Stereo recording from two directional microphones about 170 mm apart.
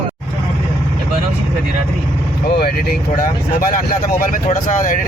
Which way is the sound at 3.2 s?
55° left (ahead or behind).